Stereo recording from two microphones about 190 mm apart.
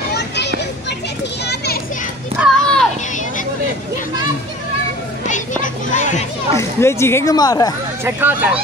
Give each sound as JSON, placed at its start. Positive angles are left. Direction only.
{"t": 2.4, "sound": "a sound", "side_deg": 5}
{"t": 5.2, "sound": "children playing", "side_deg": 40}
{"t": 6.5, "sound": "speech", "side_deg": 15}
{"t": 8.0, "sound": "speech", "side_deg": -10}